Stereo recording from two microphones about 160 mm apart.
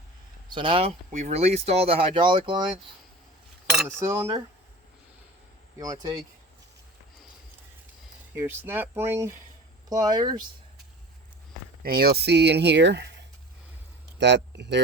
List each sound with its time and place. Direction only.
0.5 s speech: 35° right (ahead or behind)
1.1 s speech: 45° right (ahead or behind); by 2.6 s 30° right (ahead or behind)
3.8 s speech: 15° right (ahead or behind)
5.8 s speech: 25° right (ahead or behind)
8.4 s speech: 15° right (ahead or behind)
11.8 s speech: 70° right (ahead or behind); by 14.8 s 90° right